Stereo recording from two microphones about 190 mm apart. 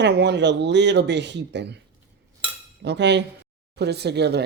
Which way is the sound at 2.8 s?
65° right (ahead or behind).